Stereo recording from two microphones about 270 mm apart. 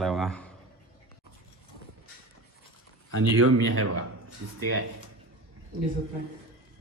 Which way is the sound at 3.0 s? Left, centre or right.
Right.